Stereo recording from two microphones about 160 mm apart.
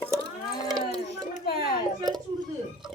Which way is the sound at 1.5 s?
70° left (ahead or behind).